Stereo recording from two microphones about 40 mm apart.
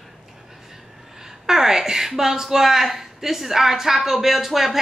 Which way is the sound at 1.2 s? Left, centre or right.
Centre.